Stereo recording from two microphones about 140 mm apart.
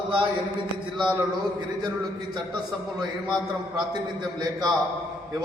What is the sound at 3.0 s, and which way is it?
A man's voice, 30° right (ahead or behind).